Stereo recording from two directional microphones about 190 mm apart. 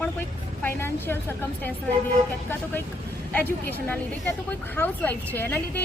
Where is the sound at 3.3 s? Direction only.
10° left (ahead or behind).